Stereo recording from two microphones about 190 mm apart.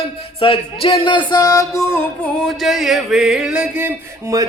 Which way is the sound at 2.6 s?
Centre (ahead or behind).